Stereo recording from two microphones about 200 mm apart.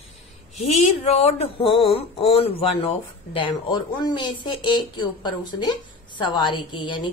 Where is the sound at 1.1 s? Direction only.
30° left (ahead or behind).